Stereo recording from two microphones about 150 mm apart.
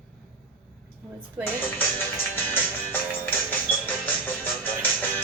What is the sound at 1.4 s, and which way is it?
Speech, 10° left (ahead or behind).